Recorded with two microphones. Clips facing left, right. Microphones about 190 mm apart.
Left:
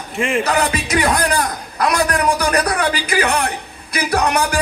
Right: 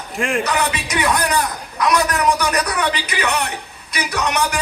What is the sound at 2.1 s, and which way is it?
Speech, 55° left (ahead or behind).